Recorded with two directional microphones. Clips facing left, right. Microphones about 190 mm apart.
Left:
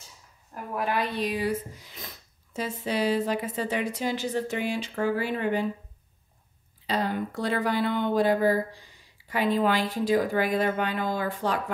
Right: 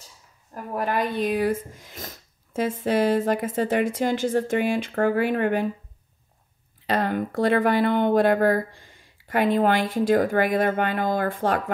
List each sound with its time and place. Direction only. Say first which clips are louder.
0.7 s speech: right 3 dB; 45° right (ahead or behind)
6.9 s speech: right 4 dB; 55° right (ahead or behind)